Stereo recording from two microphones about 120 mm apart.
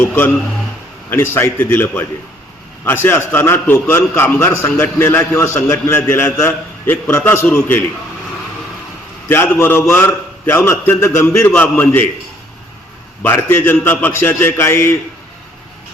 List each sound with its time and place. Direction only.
1.1 s a man's voice: 20° left (ahead or behind)
9.3 s a man's voice: 20° left (ahead or behind)
13.2 s a man's voice: 20° left (ahead or behind)